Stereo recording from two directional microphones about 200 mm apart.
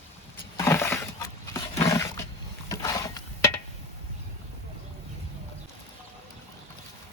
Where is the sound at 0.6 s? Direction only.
10° left (ahead or behind).